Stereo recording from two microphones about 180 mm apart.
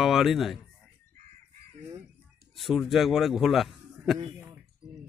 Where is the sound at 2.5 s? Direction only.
Centre (ahead or behind).